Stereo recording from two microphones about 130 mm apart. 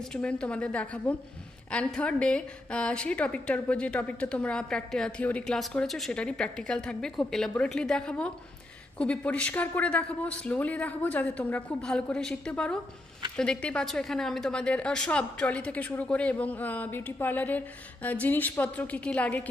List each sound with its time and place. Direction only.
0.0 s a woman's voice: 5° left (ahead or behind)